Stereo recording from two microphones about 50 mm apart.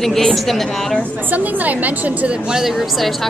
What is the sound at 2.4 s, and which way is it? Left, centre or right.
Speech, centre.